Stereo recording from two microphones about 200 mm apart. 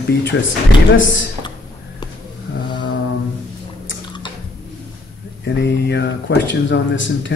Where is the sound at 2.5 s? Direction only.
60° left (ahead or behind).